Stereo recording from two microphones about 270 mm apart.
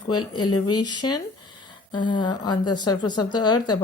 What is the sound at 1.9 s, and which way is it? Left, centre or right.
A woman's voice, centre.